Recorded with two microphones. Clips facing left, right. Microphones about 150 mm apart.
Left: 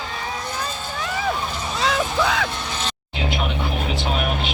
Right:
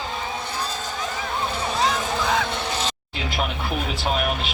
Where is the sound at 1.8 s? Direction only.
75° left (ahead or behind).